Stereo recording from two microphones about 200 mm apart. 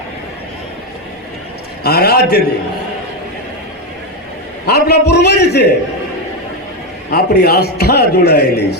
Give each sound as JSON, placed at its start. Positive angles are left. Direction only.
{"t": 1.8, "sound": "a man's voice", "side_deg": 50}
{"t": 4.6, "sound": "a man's voice", "side_deg": 55}
{"t": 7.1, "sound": "a man's voice", "side_deg": 50}